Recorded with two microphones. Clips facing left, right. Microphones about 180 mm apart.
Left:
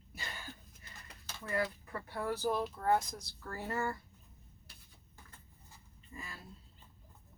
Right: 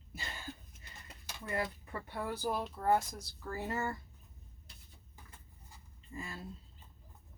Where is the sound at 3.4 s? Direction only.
20° right (ahead or behind).